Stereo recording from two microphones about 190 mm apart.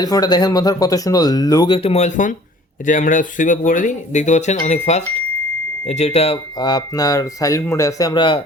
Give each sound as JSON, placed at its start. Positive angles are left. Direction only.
{"t": 0.0, "sound": "speech", "side_deg": 20}